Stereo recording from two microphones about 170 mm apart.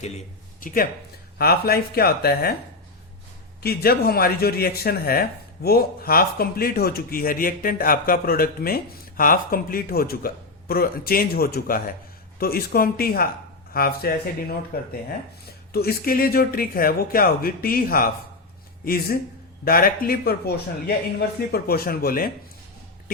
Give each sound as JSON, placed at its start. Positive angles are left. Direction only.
{"t": 0.0, "sound": "speech", "side_deg": 40}
{"t": 1.4, "sound": "speech", "side_deg": 65}
{"t": 3.6, "sound": "speech", "side_deg": 65}